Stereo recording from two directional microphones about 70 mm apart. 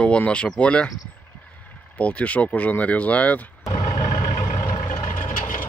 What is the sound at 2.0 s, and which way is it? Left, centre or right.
Speech, centre.